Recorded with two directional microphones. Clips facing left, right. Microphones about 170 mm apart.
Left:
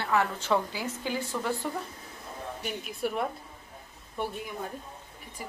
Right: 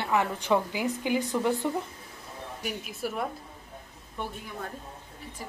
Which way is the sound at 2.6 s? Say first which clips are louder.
Left 1 dB; 5° right (ahead or behind).